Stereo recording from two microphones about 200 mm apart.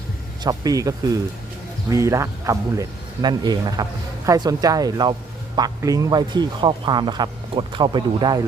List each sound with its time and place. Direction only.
0.4 s speech: 20° right (ahead or behind)